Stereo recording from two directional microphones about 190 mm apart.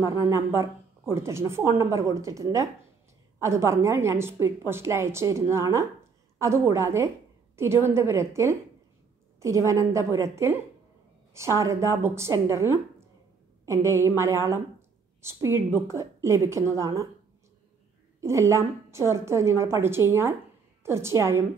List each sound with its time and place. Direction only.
0.0 s a woman's voice: 20° right (ahead or behind)
18.2 s a woman's voice: 15° right (ahead or behind)